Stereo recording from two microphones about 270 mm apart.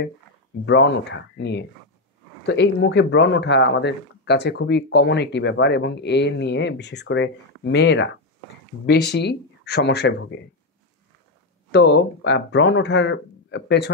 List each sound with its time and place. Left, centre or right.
0.7 s speech: left
11.7 s speech: left